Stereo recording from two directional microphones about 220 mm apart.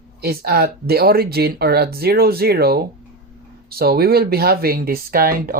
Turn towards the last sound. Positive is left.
turn(degrees=-40)  # may be behind; listen again after turning